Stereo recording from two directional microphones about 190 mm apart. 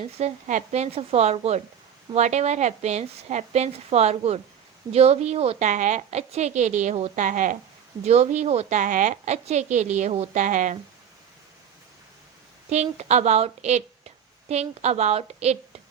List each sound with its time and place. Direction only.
0.2 s a woman's voice: 35° right (ahead or behind)
12.7 s a woman's voice: 35° right (ahead or behind)